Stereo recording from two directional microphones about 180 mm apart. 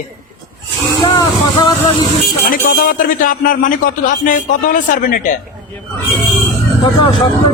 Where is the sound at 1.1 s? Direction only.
25° left (ahead or behind).